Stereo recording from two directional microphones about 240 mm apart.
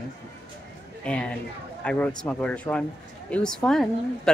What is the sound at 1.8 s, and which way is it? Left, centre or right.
A woman's voice, centre.